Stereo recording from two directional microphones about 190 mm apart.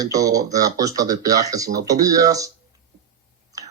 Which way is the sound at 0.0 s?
20° right (ahead or behind).